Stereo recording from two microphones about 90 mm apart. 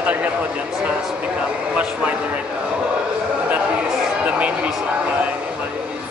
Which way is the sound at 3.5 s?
15° right (ahead or behind).